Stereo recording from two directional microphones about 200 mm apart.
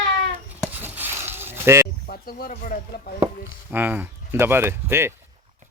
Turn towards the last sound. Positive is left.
turn(degrees=-10)  # may be behind; listen again after turning